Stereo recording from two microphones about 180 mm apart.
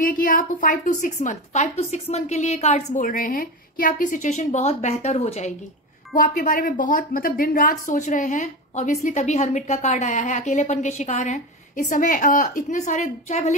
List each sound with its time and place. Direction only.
0.0 s a woman's voice: 50° left (ahead or behind)